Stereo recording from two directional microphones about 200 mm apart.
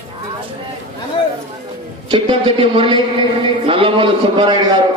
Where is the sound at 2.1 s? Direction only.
25° right (ahead or behind).